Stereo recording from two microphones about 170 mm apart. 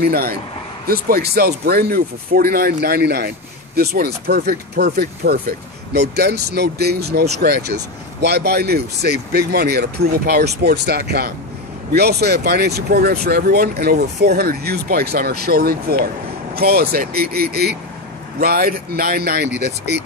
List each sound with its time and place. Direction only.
0.0 s speech: 65° right (ahead or behind)